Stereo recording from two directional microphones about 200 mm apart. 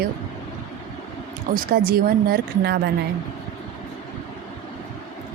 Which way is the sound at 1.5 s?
50° right (ahead or behind).